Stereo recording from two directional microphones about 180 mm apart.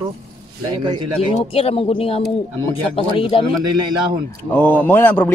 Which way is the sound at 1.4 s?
35° left (ahead or behind).